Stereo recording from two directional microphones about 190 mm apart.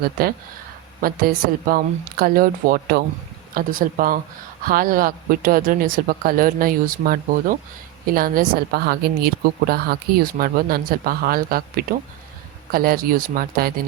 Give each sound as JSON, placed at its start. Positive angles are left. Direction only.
{"t": 0.0, "sound": "a woman's voice", "side_deg": -50}